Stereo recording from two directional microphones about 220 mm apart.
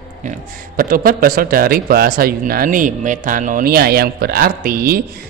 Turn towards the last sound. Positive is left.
turn(degrees=-40)  # may be behind; listen again after turning